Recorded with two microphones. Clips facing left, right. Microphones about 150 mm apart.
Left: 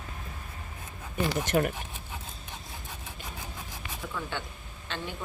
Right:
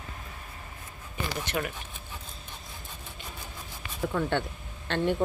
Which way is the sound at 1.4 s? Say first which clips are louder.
Left 6 dB; 45° left (ahead or behind).